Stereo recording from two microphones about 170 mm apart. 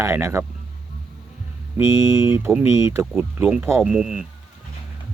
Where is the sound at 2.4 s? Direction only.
10° right (ahead or behind).